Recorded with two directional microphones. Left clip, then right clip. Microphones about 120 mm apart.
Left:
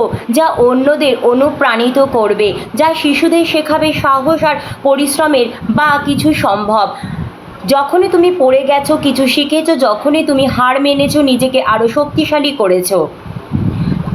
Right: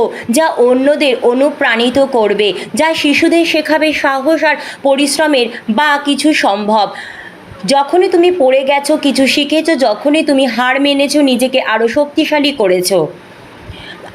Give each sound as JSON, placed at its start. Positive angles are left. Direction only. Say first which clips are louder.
{"t": 0.0, "sound": "a woman's voice", "louder": "even", "side_deg": -40}
{"t": 8.2, "sound": "a woman's voice", "louder": "even", "side_deg": -35}